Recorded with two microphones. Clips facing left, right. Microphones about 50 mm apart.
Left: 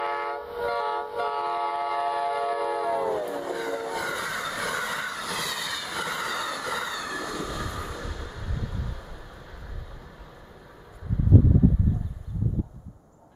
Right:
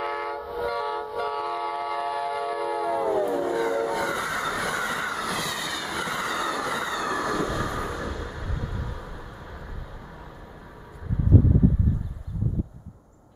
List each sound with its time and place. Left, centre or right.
0.0 s train: centre
7.1 s train: right; by 9.0 s centre